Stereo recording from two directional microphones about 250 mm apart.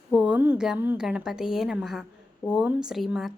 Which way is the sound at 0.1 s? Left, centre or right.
Centre.